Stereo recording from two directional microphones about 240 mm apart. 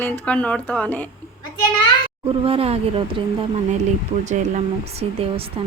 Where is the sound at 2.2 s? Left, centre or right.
Right.